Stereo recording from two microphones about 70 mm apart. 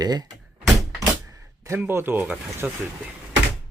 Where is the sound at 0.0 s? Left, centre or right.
Right.